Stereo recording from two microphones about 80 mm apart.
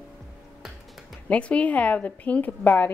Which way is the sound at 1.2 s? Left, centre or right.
Centre.